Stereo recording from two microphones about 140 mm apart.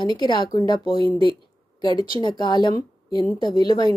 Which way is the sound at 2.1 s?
30° left (ahead or behind).